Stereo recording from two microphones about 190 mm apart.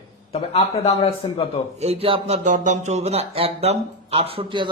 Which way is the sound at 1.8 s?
30° right (ahead or behind).